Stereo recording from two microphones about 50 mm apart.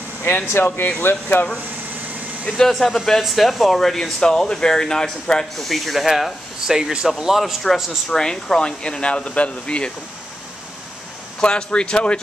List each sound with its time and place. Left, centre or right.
0.7 s speech: left
2.5 s speech: centre
5.6 s speech: centre
8.1 s speech: centre
11.4 s speech: centre